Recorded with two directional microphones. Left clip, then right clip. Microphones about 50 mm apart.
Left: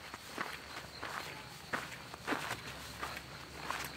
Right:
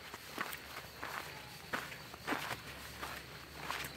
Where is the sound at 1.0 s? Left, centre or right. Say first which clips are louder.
Left 1 dB; right.